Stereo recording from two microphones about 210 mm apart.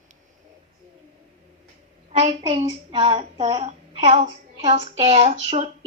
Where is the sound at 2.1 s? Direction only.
30° right (ahead or behind).